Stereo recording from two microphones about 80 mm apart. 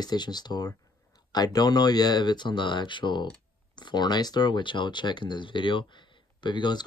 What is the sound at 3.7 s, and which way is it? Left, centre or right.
Speech, left.